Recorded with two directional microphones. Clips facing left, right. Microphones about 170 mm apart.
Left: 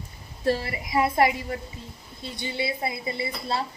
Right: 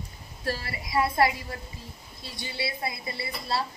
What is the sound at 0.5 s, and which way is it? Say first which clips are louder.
A woman's voice: left 7 dB; 25° left (ahead or behind).